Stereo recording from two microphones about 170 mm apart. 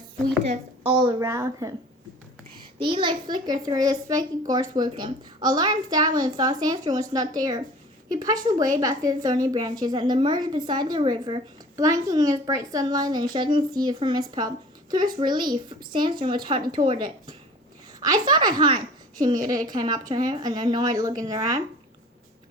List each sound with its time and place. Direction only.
0.4 s a woman's voice: 40° right (ahead or behind)
0.9 s a child's voice: 20° right (ahead or behind)
2.7 s a child's voice: 30° right (ahead or behind)